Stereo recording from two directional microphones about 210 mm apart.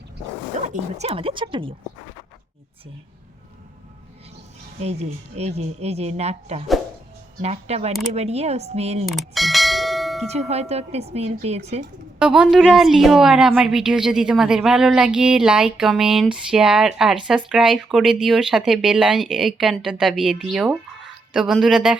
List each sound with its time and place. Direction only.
0.7 s speech: 30° right (ahead or behind)
4.8 s speech: 30° right (ahead or behind)
9.0 s bell: centre (ahead or behind)
10.2 s speech: 30° right (ahead or behind)
12.2 s speech: 5° right (ahead or behind)